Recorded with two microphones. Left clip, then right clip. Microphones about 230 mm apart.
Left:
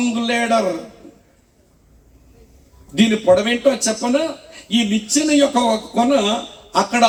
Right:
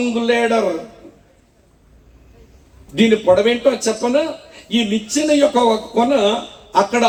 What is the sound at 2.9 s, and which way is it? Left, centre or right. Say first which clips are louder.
Speech: right 1 dB; left.